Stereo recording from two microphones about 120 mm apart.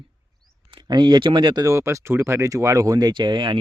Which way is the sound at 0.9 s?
35° right (ahead or behind).